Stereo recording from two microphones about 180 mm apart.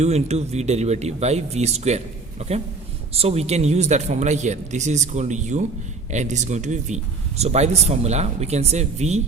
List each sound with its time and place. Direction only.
0.0 s speech: 35° right (ahead or behind)